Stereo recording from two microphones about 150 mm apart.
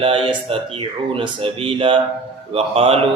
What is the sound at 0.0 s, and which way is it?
Mantra, 35° right (ahead or behind).